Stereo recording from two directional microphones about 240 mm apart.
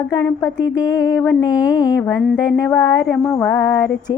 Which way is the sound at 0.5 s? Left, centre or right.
Left.